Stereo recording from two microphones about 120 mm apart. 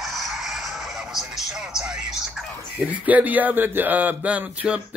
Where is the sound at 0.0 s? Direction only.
Centre (ahead or behind).